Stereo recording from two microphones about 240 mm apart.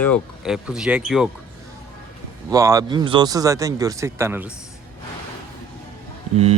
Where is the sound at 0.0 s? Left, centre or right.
Centre.